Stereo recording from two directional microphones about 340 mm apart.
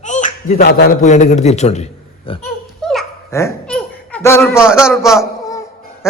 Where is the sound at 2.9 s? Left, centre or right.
Centre.